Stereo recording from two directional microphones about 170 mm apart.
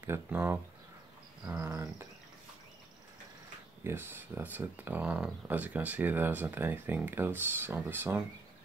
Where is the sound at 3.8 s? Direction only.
15° right (ahead or behind).